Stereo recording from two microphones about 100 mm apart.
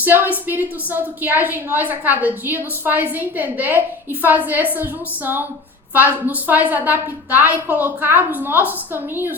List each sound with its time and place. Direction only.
0.0 s a woman's voice: 20° right (ahead or behind)